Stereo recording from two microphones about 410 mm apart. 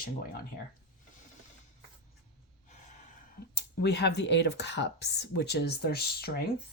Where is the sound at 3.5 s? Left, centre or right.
Left.